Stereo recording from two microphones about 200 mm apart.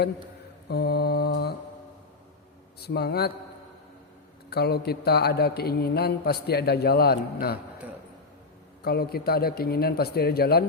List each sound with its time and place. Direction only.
0.7 s speech: 55° left (ahead or behind)
2.8 s speech: 55° left (ahead or behind)
4.4 s speech: 55° left (ahead or behind)
8.8 s speech: 50° left (ahead or behind)